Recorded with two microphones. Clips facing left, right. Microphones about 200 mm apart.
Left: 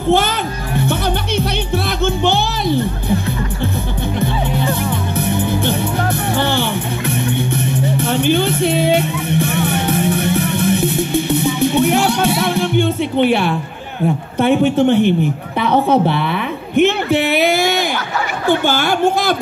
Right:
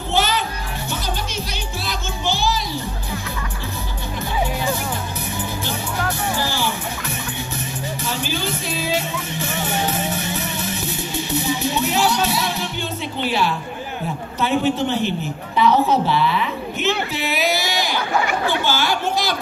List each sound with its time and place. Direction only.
0.1 s music: 55° left (ahead or behind)
4.2 s music: 60° left (ahead or behind)
14.4 s a woman's voice: 55° left (ahead or behind)